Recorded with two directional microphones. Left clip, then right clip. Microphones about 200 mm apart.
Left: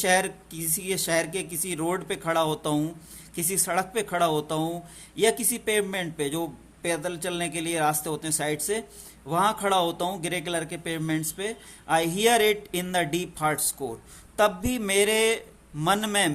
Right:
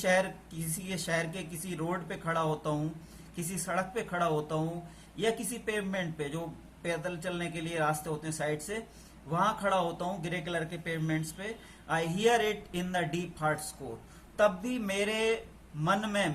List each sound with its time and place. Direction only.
0.0 s speech: 50° left (ahead or behind)